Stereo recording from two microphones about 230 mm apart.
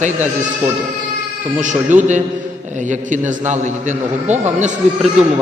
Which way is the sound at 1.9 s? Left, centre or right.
Right.